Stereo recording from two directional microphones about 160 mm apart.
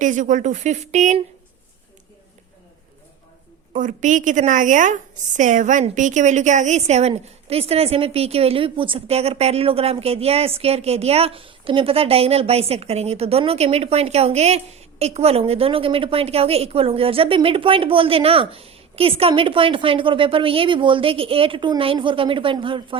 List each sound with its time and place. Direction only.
0.0 s speech: 50° right (ahead or behind)
3.8 s a woman's voice: 55° right (ahead or behind); by 23.0 s 35° right (ahead or behind)